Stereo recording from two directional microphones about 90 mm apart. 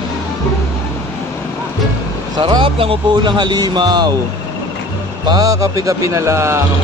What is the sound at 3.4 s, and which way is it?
Speech, 50° right (ahead or behind).